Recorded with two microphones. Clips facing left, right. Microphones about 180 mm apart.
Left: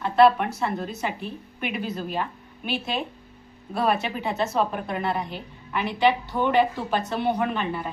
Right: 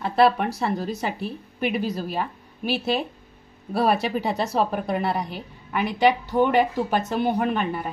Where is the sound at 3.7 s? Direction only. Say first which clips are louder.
Right 3 dB; 35° right (ahead or behind).